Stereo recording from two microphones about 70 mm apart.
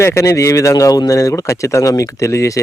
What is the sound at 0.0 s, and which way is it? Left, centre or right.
Speech, left.